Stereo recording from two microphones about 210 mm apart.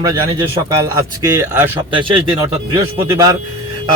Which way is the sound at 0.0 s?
15° right (ahead or behind).